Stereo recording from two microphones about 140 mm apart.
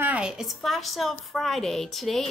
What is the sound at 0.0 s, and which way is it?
A woman's voice, 10° right (ahead or behind).